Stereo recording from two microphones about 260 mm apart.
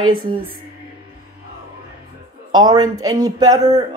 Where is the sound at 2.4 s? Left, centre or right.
Centre.